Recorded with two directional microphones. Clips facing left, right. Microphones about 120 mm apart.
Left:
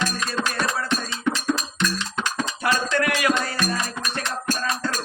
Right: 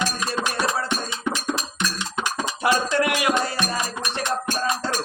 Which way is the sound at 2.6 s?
15° right (ahead or behind).